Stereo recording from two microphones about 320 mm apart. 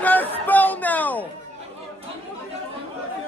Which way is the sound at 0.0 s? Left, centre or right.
Centre.